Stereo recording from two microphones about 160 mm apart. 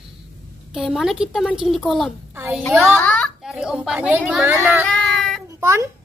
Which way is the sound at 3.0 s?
10° left (ahead or behind).